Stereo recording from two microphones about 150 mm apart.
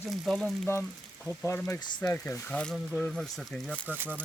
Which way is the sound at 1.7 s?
25° left (ahead or behind).